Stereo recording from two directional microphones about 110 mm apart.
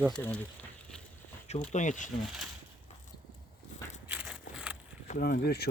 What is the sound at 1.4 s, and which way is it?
Speech, 90° left.